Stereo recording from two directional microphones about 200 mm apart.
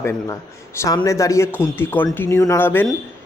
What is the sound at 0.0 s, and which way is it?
Speech, 15° left (ahead or behind).